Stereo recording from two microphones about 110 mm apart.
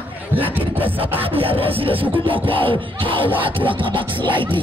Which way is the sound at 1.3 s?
60° right (ahead or behind).